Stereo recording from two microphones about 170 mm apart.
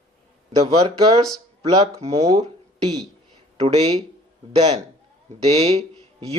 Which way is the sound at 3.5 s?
35° right (ahead or behind).